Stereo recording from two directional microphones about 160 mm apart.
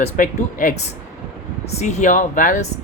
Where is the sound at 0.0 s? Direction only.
50° left (ahead or behind).